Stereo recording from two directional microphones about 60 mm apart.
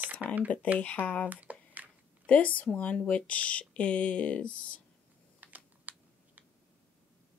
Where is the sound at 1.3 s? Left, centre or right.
Right.